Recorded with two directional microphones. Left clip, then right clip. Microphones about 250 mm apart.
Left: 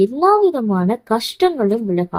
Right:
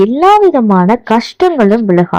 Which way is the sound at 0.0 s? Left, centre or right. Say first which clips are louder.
Right 7 dB; right.